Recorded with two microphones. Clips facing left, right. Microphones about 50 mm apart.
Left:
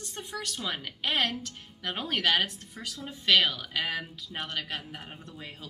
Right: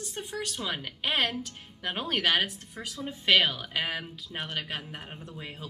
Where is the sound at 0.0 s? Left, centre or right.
Centre.